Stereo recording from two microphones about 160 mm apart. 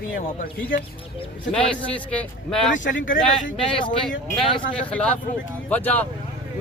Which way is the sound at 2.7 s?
55° left (ahead or behind).